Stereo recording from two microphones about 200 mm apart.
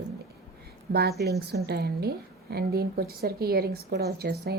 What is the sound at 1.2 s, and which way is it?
A woman's voice, 55° right (ahead or behind).